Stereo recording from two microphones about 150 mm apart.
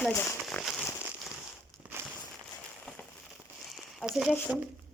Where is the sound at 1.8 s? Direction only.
10° right (ahead or behind).